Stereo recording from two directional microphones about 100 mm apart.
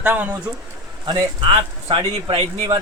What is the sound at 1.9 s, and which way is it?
Speech, 65° right (ahead or behind).